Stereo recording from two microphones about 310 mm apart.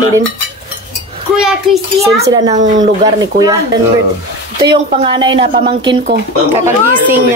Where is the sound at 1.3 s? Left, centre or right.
Centre.